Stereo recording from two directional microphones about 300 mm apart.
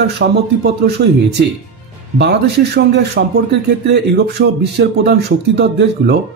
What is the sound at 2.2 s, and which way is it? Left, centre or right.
Speech, right.